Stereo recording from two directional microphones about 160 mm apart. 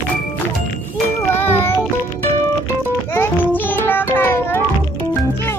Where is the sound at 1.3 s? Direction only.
15° left (ahead or behind).